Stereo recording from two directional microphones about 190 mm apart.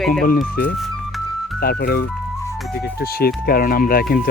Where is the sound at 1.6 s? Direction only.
55° left (ahead or behind).